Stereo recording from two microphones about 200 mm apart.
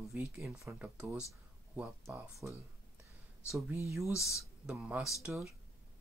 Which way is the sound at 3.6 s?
15° right (ahead or behind).